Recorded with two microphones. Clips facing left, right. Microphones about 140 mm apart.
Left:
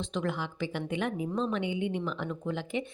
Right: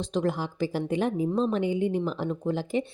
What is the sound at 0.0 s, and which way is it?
A woman's voice, 35° right (ahead or behind).